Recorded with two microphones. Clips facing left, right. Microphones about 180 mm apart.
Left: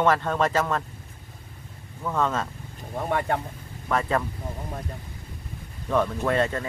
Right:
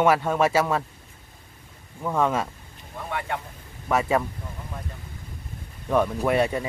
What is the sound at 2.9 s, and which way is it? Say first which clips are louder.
Speech: left 5 dB; 45° left (ahead or behind).